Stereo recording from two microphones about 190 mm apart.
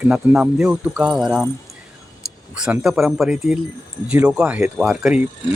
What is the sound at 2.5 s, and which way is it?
Speech, 5° right (ahead or behind).